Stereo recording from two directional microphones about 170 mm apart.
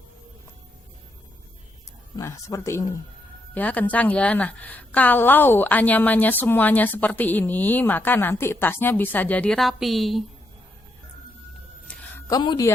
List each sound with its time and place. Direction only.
2.1 s a woman's voice: 20° left (ahead or behind); by 10.2 s centre (ahead or behind)
11.9 s a sound: 5° left (ahead or behind)
12.3 s speech: 25° left (ahead or behind)